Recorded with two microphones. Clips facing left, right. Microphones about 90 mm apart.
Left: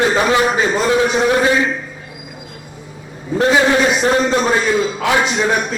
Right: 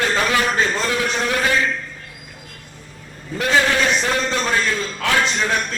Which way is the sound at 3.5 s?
20° left (ahead or behind).